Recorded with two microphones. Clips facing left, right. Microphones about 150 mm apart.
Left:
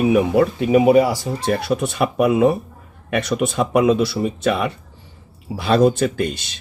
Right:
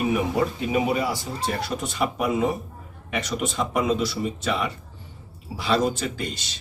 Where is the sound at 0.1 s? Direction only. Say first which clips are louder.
Left 8 dB; 75° left (ahead or behind).